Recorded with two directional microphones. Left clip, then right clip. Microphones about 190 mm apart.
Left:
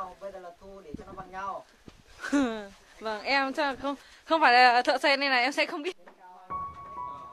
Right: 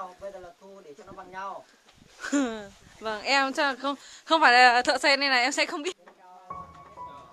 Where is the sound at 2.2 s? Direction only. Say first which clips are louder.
Even; centre (ahead or behind).